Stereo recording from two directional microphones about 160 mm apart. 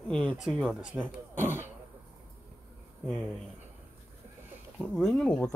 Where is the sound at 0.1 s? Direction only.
5° left (ahead or behind).